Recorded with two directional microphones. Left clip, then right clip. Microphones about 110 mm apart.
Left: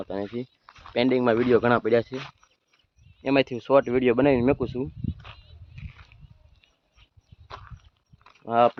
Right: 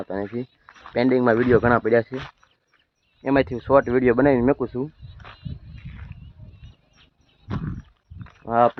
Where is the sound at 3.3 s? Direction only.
10° left (ahead or behind).